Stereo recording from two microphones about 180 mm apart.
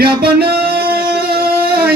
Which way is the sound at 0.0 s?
60° right (ahead or behind).